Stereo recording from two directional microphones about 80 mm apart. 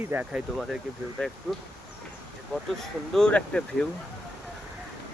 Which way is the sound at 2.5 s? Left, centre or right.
Centre.